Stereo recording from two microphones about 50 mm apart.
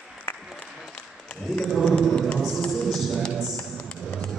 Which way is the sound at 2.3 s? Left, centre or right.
Centre.